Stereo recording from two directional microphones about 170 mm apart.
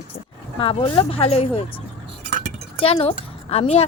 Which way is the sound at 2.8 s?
35° left (ahead or behind).